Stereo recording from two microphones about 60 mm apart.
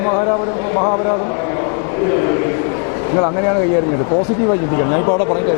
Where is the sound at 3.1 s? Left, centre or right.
Left.